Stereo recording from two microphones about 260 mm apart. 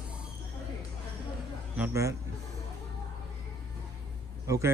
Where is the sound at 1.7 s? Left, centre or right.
Centre.